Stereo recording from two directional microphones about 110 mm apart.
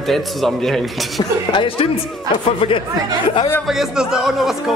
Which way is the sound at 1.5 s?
50° left (ahead or behind).